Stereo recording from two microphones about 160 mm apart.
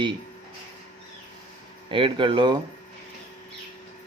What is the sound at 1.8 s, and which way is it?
Speech, 30° right (ahead or behind).